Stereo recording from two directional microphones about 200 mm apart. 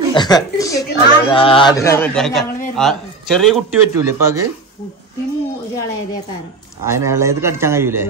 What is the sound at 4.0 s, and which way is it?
Speech, 15° right (ahead or behind).